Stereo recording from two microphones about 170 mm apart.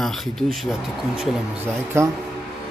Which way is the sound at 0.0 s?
Centre (ahead or behind).